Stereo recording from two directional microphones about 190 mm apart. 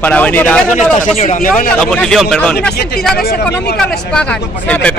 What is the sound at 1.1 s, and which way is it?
Speech, 40° left (ahead or behind).